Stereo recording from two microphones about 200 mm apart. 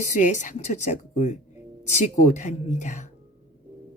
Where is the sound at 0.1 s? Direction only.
35° left (ahead or behind).